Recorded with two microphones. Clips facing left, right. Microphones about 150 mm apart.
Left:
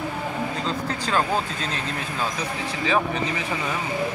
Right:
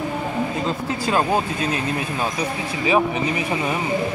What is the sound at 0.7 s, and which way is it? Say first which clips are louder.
Speech: right 3 dB; 10° right (ahead or behind).